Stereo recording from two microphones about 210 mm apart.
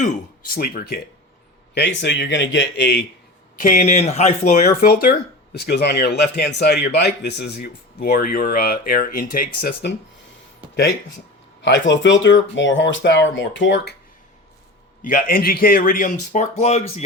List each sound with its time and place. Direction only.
0.0 s speech: 40° left (ahead or behind)
3.6 s speech: 40° left (ahead or behind)
11.6 s speech: 60° left (ahead or behind)
15.0 s speech: 40° left (ahead or behind)